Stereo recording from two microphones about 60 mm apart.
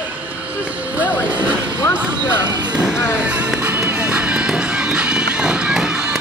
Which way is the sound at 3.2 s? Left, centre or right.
Right.